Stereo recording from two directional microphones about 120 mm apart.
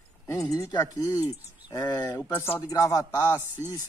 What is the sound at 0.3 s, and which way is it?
Speech, 25° left (ahead or behind).